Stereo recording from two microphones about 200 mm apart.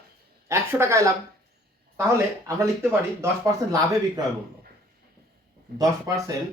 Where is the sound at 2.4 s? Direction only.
15° right (ahead or behind).